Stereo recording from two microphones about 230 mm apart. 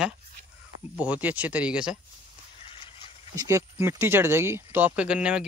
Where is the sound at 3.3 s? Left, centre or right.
Centre.